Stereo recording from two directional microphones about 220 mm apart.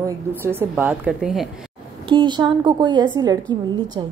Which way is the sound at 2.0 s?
20° right (ahead or behind).